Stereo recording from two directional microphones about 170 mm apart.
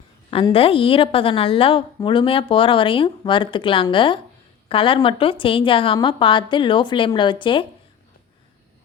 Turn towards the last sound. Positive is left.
turn(degrees=30)  # may be behind; listen again after turning